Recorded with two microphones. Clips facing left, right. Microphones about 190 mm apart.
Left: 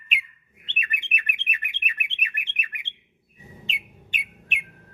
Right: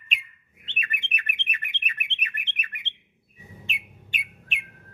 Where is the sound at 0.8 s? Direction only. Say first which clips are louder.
Left 1 dB; 15° left (ahead or behind).